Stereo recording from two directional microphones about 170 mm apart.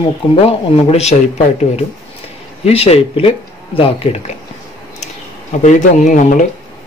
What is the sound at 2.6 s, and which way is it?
Speech, 35° left (ahead or behind).